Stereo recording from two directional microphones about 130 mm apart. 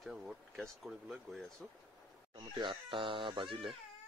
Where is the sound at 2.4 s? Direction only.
40° right (ahead or behind).